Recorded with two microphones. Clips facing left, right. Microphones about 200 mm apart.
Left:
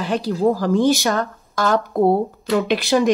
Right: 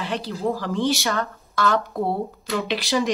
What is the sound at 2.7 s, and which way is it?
Speech, 55° left (ahead or behind).